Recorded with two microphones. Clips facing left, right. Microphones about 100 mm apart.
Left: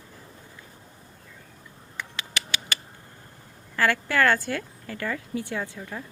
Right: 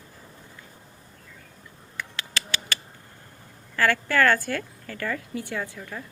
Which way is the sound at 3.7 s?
15° left (ahead or behind).